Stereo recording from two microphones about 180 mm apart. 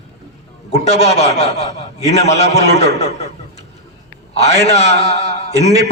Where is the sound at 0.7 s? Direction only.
35° left (ahead or behind).